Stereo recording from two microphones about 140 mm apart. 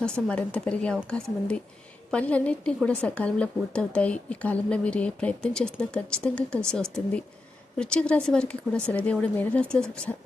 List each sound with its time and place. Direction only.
0.0 s a woman's voice: 5° left (ahead or behind)